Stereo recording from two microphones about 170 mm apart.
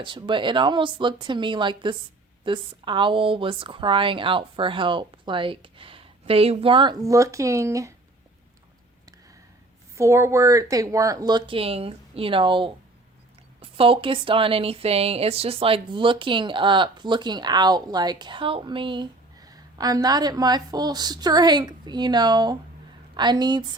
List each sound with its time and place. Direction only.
0.0 s speech: 30° right (ahead or behind)
9.9 s speech: 15° right (ahead or behind)